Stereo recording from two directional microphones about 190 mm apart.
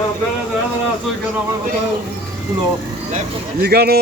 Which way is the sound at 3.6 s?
55° right (ahead or behind).